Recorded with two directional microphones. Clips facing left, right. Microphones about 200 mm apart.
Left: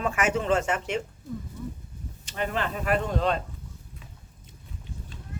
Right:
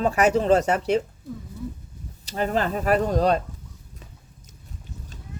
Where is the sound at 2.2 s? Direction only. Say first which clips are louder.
Right 5 dB; 35° right (ahead or behind).